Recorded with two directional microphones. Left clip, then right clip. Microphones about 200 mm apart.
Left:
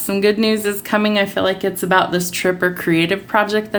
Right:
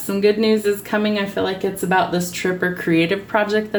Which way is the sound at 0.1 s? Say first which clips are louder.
Even; 35° left (ahead or behind).